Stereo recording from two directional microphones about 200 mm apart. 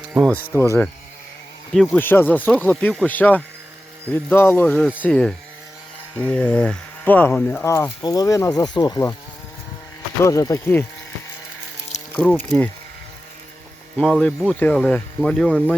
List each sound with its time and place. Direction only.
0.0 s music: 5° right (ahead or behind)
0.6 s speech: 10° left (ahead or behind)
10.2 s speech: 15° left (ahead or behind)
12.1 s speech: 5° left (ahead or behind)
14.0 s speech: 5° left (ahead or behind)